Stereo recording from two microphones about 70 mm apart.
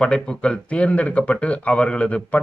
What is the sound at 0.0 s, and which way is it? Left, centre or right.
Speech, centre.